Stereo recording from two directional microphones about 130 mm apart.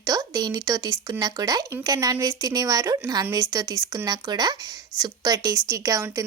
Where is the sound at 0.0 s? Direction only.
25° right (ahead or behind).